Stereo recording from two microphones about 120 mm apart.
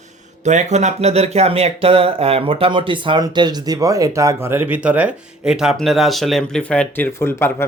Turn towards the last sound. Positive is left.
turn(degrees=20)  # may be behind; listen again after turning